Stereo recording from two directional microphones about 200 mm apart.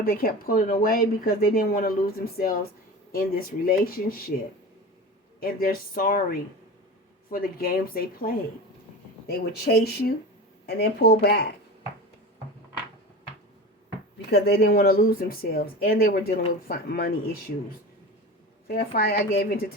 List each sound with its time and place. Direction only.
0.0 s speech: 45° left (ahead or behind)
5.4 s speech: 45° left (ahead or behind)
14.3 s speech: 50° left (ahead or behind)
18.7 s speech: 50° left (ahead or behind)